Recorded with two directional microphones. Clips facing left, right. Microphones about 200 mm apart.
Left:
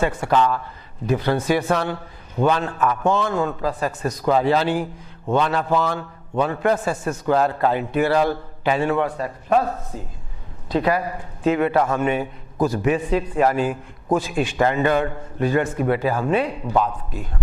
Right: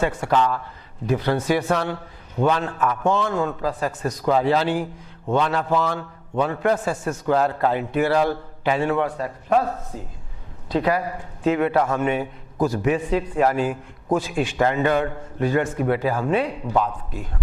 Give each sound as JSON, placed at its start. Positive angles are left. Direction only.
{"t": 0.0, "sound": "a man's voice", "side_deg": 15}